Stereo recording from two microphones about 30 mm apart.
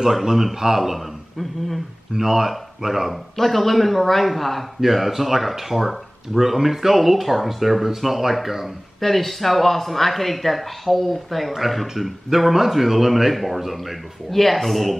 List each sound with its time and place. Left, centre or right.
0.0 s speech: centre
2.1 s speech: centre
3.3 s a man's voice: centre
9.0 s a man's voice: centre